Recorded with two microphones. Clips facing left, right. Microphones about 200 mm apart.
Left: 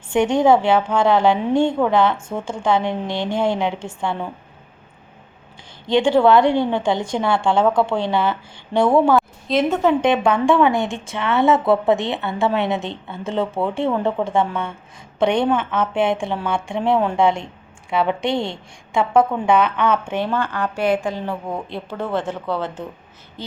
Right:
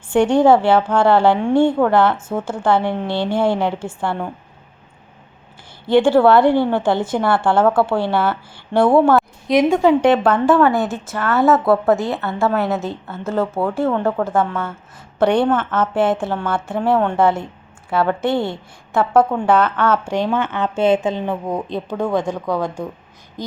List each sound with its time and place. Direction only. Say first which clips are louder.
0.1 s a woman's voice: right 2 dB; 10° right (ahead or behind)
5.8 s a woman's voice: right 3 dB; 5° right (ahead or behind)
15.4 s a woman's voice: right 1 dB; 10° left (ahead or behind)
15.8 s a woman's voice: right 2 dB; 5° right (ahead or behind)
19.6 s a woman's voice: right 1 dB; 10° left (ahead or behind)
19.9 s a woman's voice: right 2 dB; 15° right (ahead or behind)